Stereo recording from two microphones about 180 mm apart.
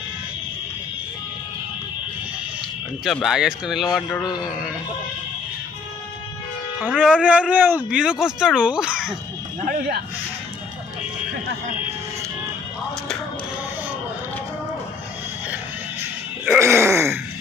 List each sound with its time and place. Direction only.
3.0 s speech: centre (ahead or behind)
6.9 s speech: 5° right (ahead or behind)
9.7 s speech: 65° right (ahead or behind)
15.5 s music: 10° right (ahead or behind)